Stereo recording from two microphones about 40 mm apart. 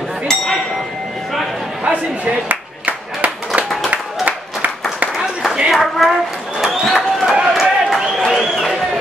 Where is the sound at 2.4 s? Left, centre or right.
Right.